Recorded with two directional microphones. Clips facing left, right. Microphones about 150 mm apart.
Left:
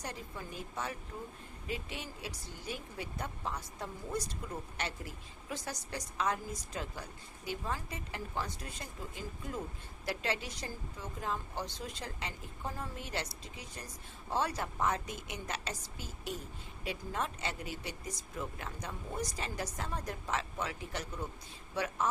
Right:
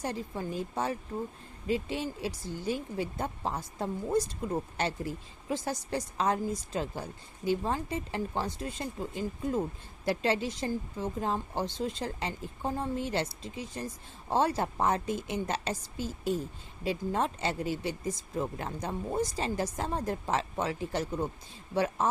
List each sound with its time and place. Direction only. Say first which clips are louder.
0.0 s speech: right 9 dB; 30° right (ahead or behind)
10.1 s speech: right 8 dB; 30° right (ahead or behind)